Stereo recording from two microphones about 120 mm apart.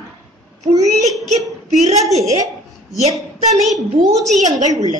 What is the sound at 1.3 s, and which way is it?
A woman's voice, 70° right (ahead or behind).